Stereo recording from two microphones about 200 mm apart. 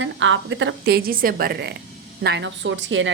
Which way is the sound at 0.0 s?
70° right (ahead or behind).